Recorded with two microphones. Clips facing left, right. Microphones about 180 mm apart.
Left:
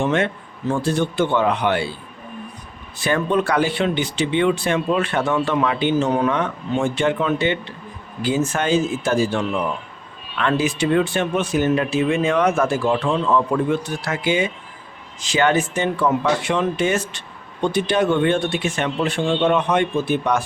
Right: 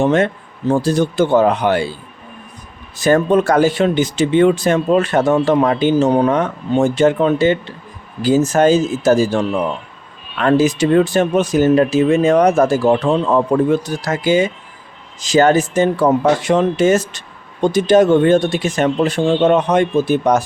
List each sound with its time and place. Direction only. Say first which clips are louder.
0.0 s speech: right 6 dB; 40° right (ahead or behind)
3.0 s speech: right 7 dB; 40° right (ahead or behind)